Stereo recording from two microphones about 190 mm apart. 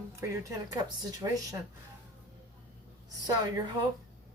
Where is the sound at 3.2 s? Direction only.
20° right (ahead or behind).